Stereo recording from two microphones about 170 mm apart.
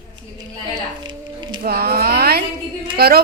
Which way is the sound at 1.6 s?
65° right (ahead or behind).